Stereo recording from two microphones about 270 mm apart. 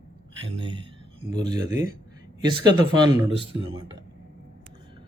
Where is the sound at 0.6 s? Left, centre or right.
Centre.